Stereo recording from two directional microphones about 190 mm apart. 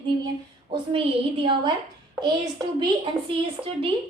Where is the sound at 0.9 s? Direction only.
30° right (ahead or behind).